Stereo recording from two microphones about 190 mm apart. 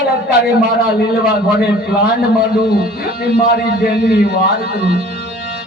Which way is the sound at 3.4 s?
55° left (ahead or behind).